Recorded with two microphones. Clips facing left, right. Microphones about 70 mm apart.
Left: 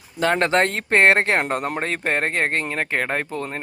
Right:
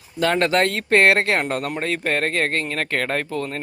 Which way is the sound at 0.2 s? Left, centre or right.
Left.